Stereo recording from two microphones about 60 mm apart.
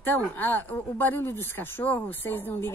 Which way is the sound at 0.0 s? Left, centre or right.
Left.